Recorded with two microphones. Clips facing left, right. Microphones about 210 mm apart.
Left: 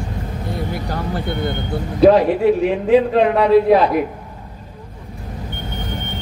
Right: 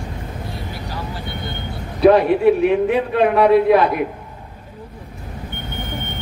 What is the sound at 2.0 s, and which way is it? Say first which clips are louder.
A man's voice: left 1 dB; 60° right (ahead or behind).